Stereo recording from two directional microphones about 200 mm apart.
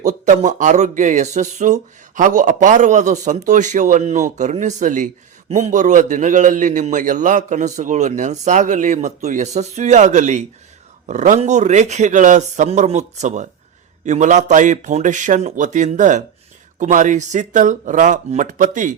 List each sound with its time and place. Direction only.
0.0 s speech: 35° right (ahead or behind)